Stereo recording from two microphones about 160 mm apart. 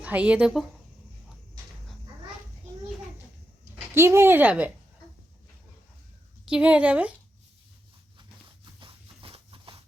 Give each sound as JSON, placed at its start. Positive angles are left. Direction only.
{"t": 0.0, "sound": "speech", "side_deg": -10}
{"t": 3.9, "sound": "speech", "side_deg": -15}
{"t": 6.5, "sound": "speech", "side_deg": -10}
{"t": 8.8, "sound": "a sound", "side_deg": -35}